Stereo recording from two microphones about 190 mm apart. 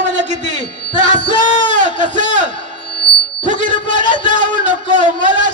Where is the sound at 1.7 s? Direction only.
40° right (ahead or behind).